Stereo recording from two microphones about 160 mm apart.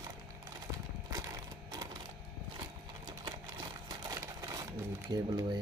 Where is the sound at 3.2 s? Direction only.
25° right (ahead or behind).